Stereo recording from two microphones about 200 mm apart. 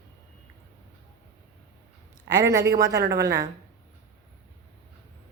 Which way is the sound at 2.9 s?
55° right (ahead or behind).